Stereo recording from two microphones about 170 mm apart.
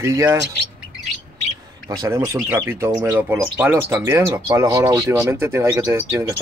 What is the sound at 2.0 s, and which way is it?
Speech, 15° right (ahead or behind).